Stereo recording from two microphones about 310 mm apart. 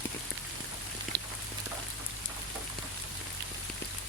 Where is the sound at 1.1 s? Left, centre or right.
Right.